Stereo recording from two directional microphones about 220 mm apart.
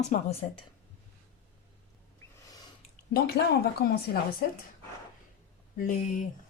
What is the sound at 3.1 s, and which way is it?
Speech, 45° left (ahead or behind).